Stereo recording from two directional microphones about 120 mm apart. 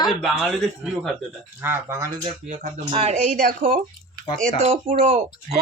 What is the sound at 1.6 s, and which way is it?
Speech, 25° right (ahead or behind).